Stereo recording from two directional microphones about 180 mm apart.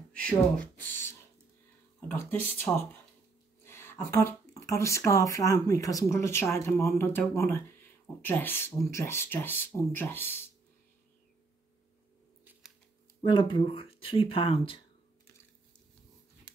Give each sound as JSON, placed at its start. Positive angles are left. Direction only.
{"t": 0.1, "sound": "speech", "side_deg": 5}
{"t": 2.0, "sound": "speech", "side_deg": 10}
{"t": 13.2, "sound": "speech", "side_deg": 25}
{"t": 16.5, "sound": "a sound", "side_deg": 10}